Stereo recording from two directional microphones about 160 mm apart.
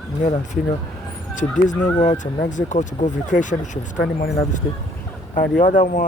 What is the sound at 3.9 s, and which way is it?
Speech, 90° left.